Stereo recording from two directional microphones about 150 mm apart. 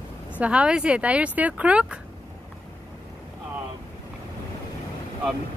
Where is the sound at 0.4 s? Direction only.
10° right (ahead or behind).